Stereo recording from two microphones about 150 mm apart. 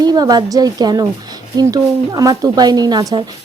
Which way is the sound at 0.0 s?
25° right (ahead or behind).